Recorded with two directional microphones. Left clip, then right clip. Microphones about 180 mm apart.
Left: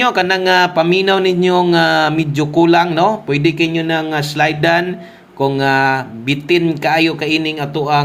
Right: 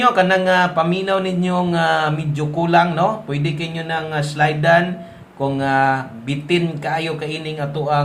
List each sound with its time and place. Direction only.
0.0 s speech: 30° left (ahead or behind)